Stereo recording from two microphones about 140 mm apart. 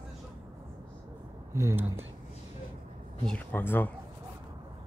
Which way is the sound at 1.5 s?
20° right (ahead or behind).